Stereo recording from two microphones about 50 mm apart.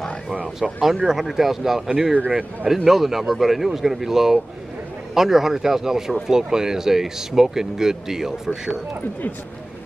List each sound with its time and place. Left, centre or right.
0.7 s speech: centre
2.7 s speech: centre